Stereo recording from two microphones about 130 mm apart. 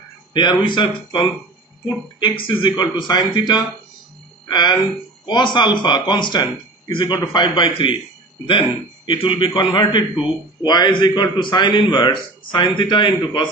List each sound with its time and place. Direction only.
0.3 s speech: 35° left (ahead or behind)
9.0 s speech: 40° left (ahead or behind)